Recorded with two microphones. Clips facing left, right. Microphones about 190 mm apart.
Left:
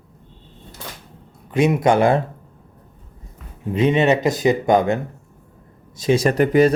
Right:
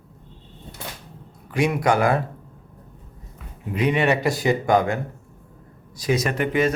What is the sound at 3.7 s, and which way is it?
Speech, 25° left (ahead or behind).